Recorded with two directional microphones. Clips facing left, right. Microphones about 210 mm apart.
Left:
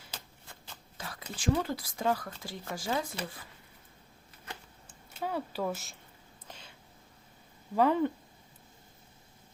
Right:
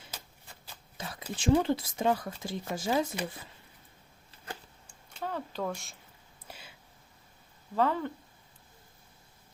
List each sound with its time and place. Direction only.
0.9 s speech: 20° right (ahead or behind)
4.9 s a sound: 10° left (ahead or behind); by 6.7 s 10° right (ahead or behind)
7.8 s speech: 15° left (ahead or behind)